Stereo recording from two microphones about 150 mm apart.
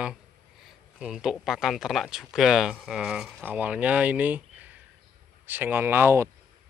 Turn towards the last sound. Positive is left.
turn(degrees=-15)  # may be behind; listen again after turning